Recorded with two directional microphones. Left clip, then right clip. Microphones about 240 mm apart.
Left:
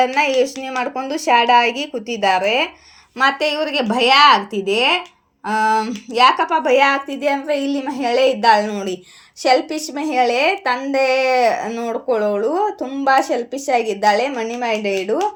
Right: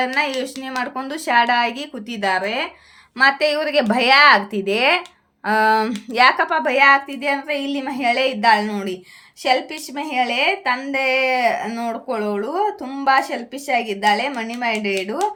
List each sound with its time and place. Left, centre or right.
0.0 s a woman's voice: centre
15.1 s a woman's voice: centre